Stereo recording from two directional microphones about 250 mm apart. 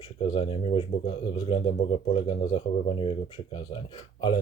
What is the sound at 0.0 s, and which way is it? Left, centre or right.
Speech, centre.